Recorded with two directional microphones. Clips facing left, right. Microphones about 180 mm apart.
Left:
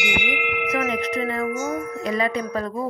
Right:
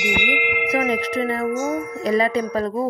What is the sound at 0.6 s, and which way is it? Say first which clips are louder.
Wind chime: right 3 dB; 35° right (ahead or behind).